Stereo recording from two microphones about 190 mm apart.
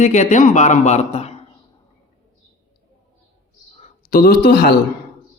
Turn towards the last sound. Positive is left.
turn(degrees=55)  # may be behind; listen again after turning